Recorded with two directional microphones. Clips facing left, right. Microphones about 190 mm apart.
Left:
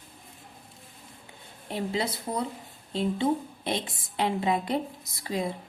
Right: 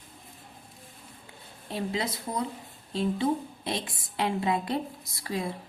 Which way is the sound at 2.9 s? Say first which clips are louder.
Left 1 dB; 25° left (ahead or behind).